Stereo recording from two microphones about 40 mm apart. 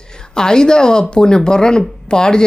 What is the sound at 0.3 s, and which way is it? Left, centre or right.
A woman's voice, centre.